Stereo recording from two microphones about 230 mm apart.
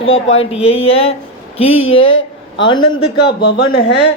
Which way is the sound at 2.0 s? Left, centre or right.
Left.